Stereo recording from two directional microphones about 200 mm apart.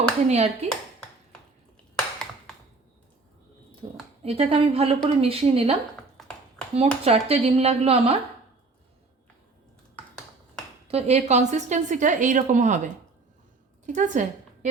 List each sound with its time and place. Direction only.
0.3 s a woman's voice: 30° right (ahead or behind)
3.8 s a sound: 25° right (ahead or behind)
4.2 s a woman's voice: 30° right (ahead or behind)
6.7 s a woman's voice: 30° right (ahead or behind)
10.8 s a woman's voice: 30° right (ahead or behind)
13.8 s a woman's voice: 40° right (ahead or behind)